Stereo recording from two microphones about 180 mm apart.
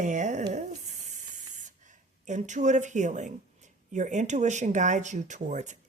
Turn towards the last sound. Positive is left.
turn(degrees=-40)  # may be behind; listen again after turning